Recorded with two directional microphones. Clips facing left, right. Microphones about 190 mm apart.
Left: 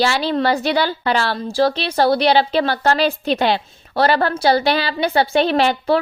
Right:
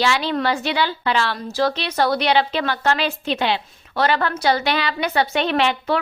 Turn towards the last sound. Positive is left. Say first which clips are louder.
# left 4 dB
turn(degrees=35)  # may be behind; listen again after turning